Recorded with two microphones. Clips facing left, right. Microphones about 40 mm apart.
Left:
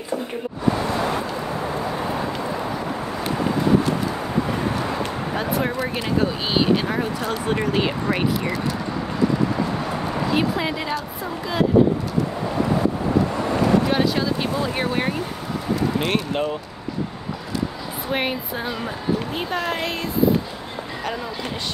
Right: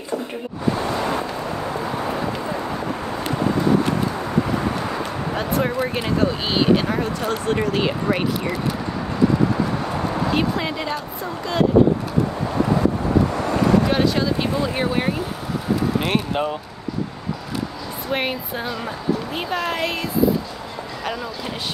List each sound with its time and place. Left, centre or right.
5.3 s speech: centre
10.3 s speech: centre
13.8 s speech: centre
18.1 s speech: centre